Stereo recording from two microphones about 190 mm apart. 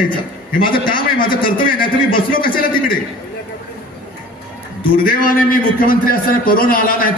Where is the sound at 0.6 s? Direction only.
50° left (ahead or behind).